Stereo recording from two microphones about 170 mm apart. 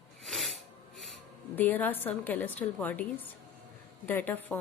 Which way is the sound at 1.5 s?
10° left (ahead or behind).